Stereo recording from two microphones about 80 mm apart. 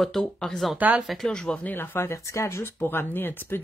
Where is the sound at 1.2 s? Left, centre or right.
Centre.